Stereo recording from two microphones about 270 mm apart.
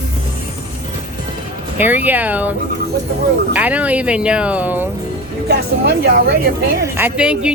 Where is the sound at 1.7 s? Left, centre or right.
Centre.